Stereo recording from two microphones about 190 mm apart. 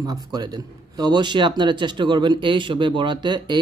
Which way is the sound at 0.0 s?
20° right (ahead or behind).